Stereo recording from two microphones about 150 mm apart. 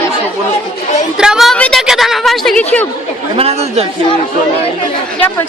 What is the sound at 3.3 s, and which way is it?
Speech, 40° right (ahead or behind).